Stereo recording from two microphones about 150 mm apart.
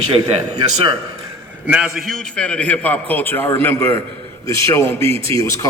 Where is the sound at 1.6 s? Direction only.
5° right (ahead or behind); by 5.7 s 20° left (ahead or behind).